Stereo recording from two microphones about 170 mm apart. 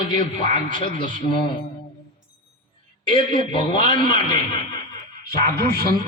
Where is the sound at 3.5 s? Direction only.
30° left (ahead or behind).